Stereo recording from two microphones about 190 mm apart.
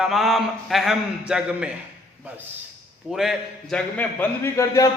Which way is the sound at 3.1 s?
Centre (ahead or behind).